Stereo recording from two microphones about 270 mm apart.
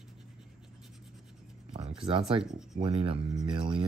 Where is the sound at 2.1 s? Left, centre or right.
Centre.